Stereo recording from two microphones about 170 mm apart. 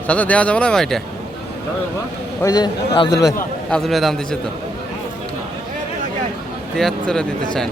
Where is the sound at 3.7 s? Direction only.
Centre (ahead or behind).